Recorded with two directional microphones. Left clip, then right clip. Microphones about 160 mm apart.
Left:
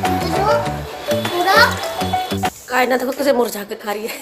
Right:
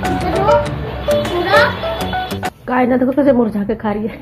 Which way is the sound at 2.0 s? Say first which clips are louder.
Left 1 dB; centre (ahead or behind).